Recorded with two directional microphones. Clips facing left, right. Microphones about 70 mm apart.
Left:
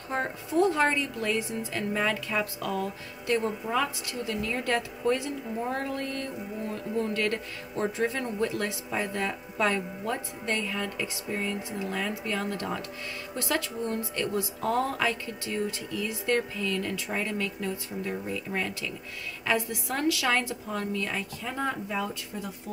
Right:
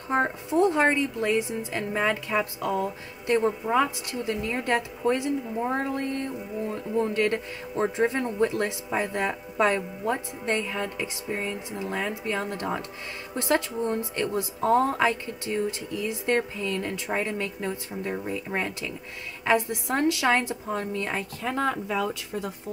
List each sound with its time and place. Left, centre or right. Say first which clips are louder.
0.1 s speech: right 4 dB; right
21.4 s speech: right 6 dB; right